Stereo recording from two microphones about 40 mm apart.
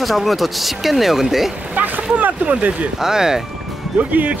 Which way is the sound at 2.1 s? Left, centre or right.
Right.